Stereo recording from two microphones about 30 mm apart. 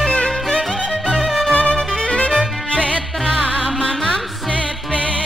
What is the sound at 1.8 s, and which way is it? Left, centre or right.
Music, left.